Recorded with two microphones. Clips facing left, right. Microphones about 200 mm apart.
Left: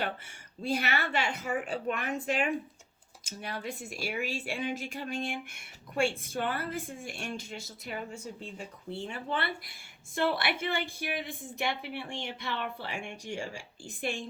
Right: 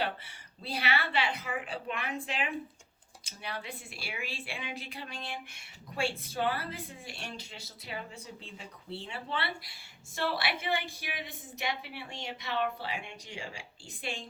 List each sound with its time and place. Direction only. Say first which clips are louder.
0.0 s speech: even; 50° left (ahead or behind)